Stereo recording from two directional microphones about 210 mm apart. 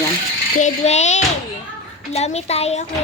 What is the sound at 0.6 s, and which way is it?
A child's voice, 35° left (ahead or behind).